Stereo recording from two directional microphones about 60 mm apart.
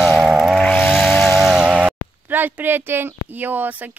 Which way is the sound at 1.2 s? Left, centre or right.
Centre.